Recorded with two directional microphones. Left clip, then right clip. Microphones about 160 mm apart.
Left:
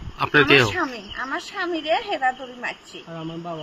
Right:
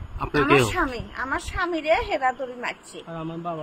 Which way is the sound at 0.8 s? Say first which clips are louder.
Even; 25° right (ahead or behind).